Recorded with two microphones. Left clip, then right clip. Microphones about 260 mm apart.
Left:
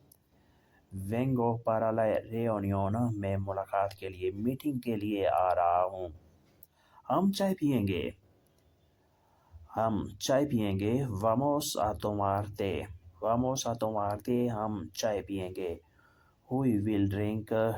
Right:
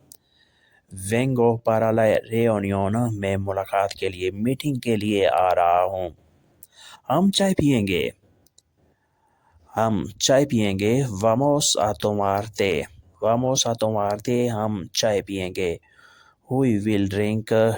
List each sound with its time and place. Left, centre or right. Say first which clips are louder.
1.0 s speech: right 11 dB; right
9.7 s speech: right 8 dB; right